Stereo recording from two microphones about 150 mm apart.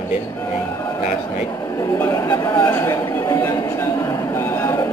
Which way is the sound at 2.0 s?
15° left (ahead or behind).